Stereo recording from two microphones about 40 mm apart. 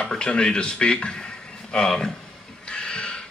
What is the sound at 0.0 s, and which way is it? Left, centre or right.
Speech, left.